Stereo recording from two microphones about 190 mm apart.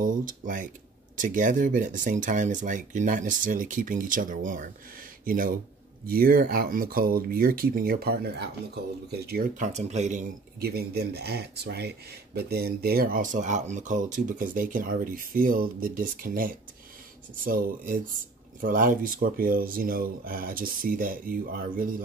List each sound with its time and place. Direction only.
0.0 s speech: 45° right (ahead or behind)
10.6 s speech: 55° right (ahead or behind)